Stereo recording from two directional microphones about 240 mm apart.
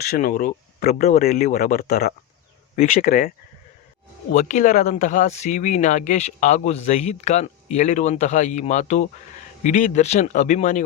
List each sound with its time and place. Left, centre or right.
0.2 s speech: left